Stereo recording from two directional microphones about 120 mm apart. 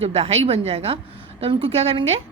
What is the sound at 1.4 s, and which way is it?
Speech, 50° right (ahead or behind).